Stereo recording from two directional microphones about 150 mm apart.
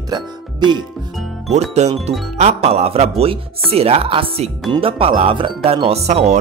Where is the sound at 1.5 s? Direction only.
50° right (ahead or behind).